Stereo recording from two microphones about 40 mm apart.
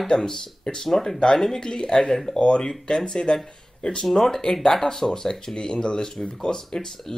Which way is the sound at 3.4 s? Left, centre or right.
Centre.